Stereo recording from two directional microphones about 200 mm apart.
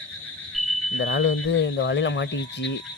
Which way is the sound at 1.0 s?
80° left.